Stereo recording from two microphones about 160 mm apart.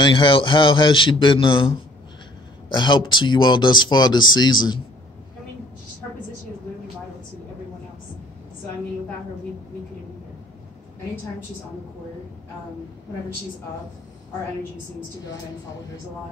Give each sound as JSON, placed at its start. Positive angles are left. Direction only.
{"t": 0.0, "sound": "a man's voice", "side_deg": 30}